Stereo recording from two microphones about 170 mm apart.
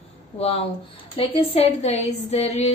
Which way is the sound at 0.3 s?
35° left (ahead or behind).